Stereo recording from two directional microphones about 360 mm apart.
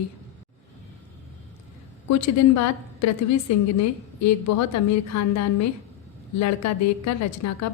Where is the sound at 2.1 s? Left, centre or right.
Left.